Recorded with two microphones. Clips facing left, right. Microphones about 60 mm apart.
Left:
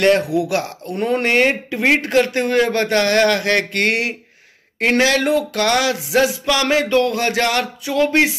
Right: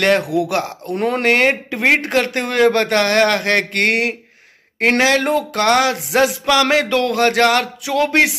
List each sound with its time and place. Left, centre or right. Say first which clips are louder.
0.2 s a man's voice: right 1 dB; right
0.9 s speech: even; right
1.2 s a man's voice: right 2 dB; right
7.8 s speech: left 1 dB; right